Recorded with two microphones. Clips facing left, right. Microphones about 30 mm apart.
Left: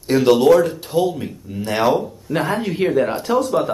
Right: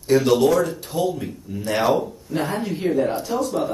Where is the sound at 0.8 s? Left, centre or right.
Left.